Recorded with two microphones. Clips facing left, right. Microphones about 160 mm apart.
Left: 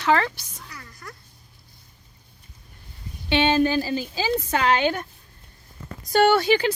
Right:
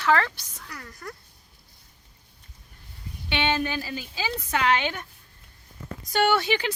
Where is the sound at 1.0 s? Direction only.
40° right (ahead or behind).